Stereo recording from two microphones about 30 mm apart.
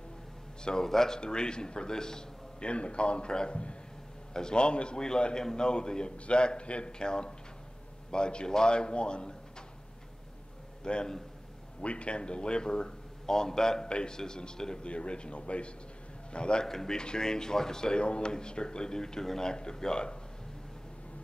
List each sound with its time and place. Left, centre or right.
0.8 s speech: centre
1.2 s a man's voice: left
2.6 s a man's voice: left
6.9 s a man's voice: left
10.8 s a man's voice: left
11.8 s a man's voice: left
13.8 s a man's voice: left
14.8 s a man's voice: left
16.6 s a man's voice: centre
17.9 s a man's voice: left